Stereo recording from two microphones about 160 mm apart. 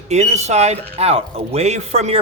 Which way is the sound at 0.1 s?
45° right (ahead or behind).